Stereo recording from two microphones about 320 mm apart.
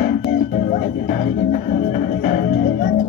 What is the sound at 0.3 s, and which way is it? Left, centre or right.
Music, left.